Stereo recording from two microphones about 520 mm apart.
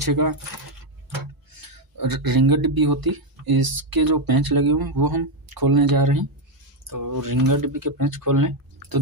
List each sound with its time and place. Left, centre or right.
0.0 s speech: right
1.6 s speech: right